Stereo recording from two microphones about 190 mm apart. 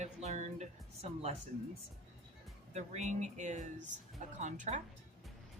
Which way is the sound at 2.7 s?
35° right (ahead or behind).